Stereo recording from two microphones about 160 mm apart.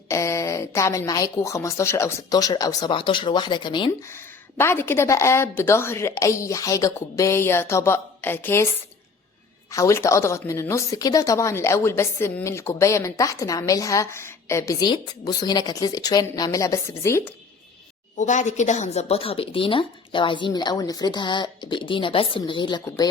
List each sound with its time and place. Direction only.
0.1 s a woman's voice: 20° left (ahead or behind)
4.1 s a woman's voice: 15° left (ahead or behind)
9.7 s a woman's voice: 20° left (ahead or behind)
18.2 s a woman's voice: 50° left (ahead or behind); by 23.0 s 30° left (ahead or behind)